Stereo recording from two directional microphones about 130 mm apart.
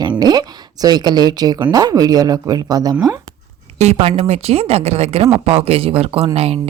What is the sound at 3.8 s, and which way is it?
Speech, 55° right (ahead or behind).